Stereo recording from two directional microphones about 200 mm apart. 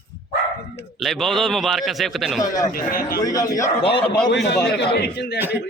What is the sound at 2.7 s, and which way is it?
Speech, 45° left (ahead or behind).